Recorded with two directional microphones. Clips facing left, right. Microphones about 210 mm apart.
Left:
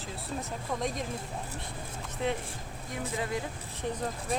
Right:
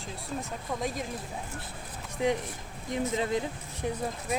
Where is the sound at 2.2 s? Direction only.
15° right (ahead or behind).